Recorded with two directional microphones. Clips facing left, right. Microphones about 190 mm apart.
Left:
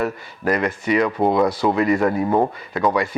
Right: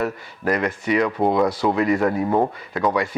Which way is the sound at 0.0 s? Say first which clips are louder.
Left 1 dB; 15° left (ahead or behind).